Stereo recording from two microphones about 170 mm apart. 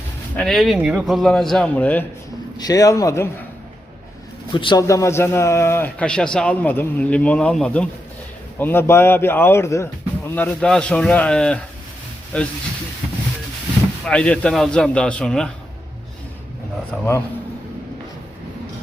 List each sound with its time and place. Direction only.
0.3 s a man's voice: centre (ahead or behind)
2.6 s speech: 20° left (ahead or behind)
4.5 s a man's voice: 30° left (ahead or behind); by 12.5 s 5° left (ahead or behind)
14.0 s a man's voice: 5° left (ahead or behind)
17.0 s a man's voice: 10° left (ahead or behind)